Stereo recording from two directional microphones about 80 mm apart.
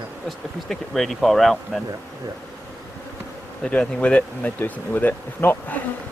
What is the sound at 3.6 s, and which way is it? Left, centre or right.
Speech, centre.